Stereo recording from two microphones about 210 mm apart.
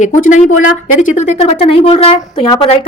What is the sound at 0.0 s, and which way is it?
A woman's voice, 35° left (ahead or behind).